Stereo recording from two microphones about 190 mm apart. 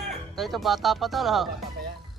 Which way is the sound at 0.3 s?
Centre (ahead or behind).